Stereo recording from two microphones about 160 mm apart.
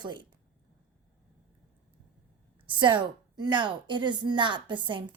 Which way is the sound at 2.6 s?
30° right (ahead or behind).